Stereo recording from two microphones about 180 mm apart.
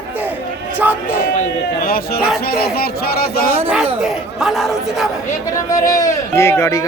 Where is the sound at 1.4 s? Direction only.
55° left (ahead or behind).